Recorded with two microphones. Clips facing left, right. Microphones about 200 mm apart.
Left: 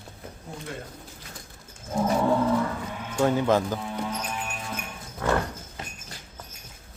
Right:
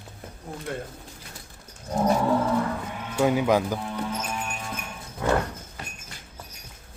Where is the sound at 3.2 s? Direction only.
10° right (ahead or behind).